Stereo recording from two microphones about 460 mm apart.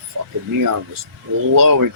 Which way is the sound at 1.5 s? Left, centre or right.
Right.